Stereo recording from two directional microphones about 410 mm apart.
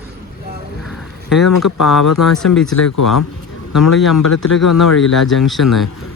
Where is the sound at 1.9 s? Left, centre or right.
Left.